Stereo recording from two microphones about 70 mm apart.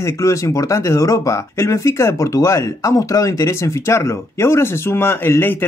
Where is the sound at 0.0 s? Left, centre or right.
Left.